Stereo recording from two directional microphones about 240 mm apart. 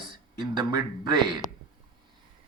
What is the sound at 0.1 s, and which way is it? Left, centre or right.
Speech, centre.